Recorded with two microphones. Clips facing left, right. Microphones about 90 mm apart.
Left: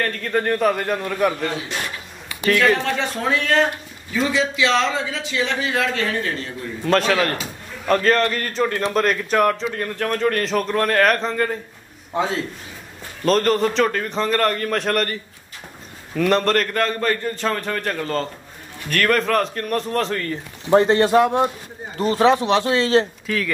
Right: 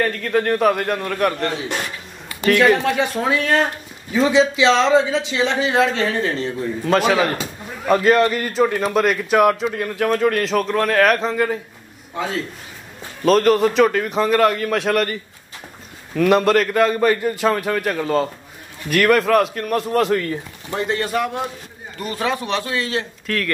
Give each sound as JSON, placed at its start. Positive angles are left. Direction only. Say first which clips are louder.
{"t": 0.0, "sound": "a man's voice", "louder": "right 3 dB", "side_deg": 0}
{"t": 2.5, "sound": "a man's voice", "louder": "right 3 dB", "side_deg": -10}
{"t": 4.3, "sound": "a man's voice", "louder": "right 5 dB", "side_deg": -25}
{"t": 6.8, "sound": "a man's voice", "louder": "right 1 dB", "side_deg": -5}
{"t": 13.2, "sound": "a man's voice", "louder": "right 3 dB", "side_deg": -5}
{"t": 16.2, "sound": "a man's voice", "louder": "right 3 dB", "side_deg": -5}
{"t": 20.7, "sound": "speech", "louder": "left 7 dB", "side_deg": 35}
{"t": 23.2, "sound": "speech", "louder": "even", "side_deg": 5}